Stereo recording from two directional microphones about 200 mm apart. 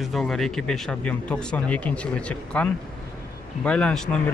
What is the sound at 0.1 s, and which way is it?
Speech, centre (ahead or behind).